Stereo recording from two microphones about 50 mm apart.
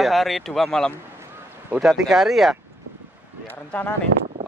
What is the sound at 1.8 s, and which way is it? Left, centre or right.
Speech, centre.